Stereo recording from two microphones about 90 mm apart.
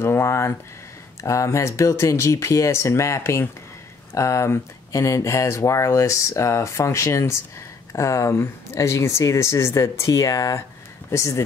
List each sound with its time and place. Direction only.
0.0 s speech: 30° left (ahead or behind)